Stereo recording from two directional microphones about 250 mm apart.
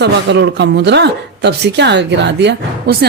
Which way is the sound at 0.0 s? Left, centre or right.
Right.